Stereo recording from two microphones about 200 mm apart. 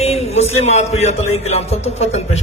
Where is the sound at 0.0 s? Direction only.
30° left (ahead or behind).